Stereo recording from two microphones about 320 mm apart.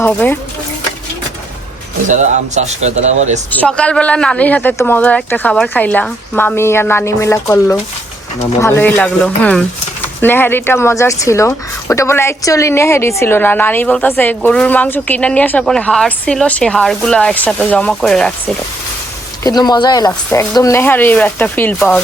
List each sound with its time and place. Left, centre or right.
0.0 s speech: centre
2.0 s speech: right
3.5 s speech: centre
19.5 s speech: centre